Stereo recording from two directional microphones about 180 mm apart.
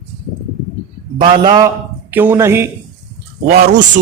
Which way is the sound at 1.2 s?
25° right (ahead or behind).